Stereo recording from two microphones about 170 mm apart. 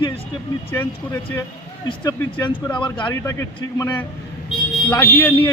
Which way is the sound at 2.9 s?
25° left (ahead or behind).